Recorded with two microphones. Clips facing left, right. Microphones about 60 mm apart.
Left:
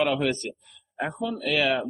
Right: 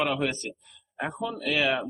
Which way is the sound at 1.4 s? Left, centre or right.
Centre.